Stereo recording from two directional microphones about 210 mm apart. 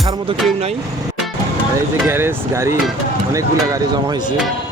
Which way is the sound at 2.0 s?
10° right (ahead or behind).